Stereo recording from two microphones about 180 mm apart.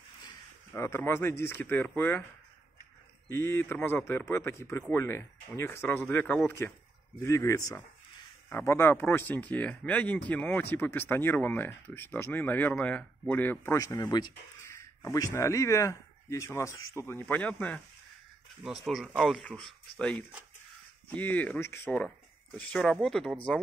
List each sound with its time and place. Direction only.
0.7 s speech: 15° left (ahead or behind)
3.3 s speech: 15° left (ahead or behind)
18.9 s speech: centre (ahead or behind)